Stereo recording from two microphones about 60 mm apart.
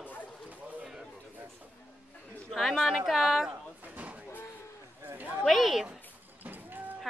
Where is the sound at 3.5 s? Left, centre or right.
Right.